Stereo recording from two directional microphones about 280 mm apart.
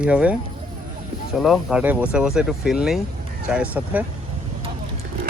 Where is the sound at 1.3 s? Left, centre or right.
Centre.